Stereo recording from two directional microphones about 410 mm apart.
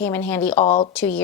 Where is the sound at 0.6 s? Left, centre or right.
Centre.